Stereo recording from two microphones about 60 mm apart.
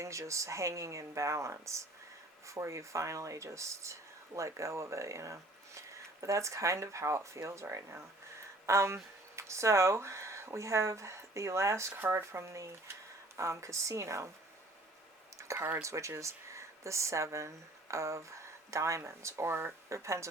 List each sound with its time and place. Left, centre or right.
0.0 s speech: right
11.9 s speech: right
15.5 s speech: right
15.8 s speech: right